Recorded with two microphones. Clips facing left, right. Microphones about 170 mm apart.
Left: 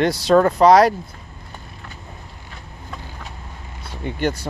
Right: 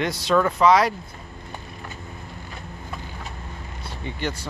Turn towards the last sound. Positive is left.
turn(degrees=50)  # may be behind; listen again after turning